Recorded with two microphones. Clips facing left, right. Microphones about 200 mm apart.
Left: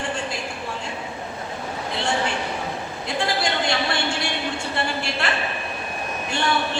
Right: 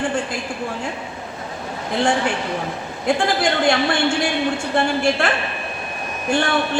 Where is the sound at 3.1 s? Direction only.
50° right (ahead or behind).